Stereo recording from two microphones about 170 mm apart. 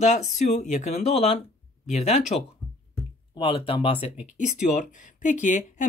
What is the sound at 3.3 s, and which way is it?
Speech, 30° left (ahead or behind).